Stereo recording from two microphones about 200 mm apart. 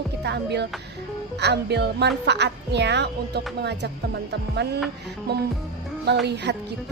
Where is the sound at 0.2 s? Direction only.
55° right (ahead or behind).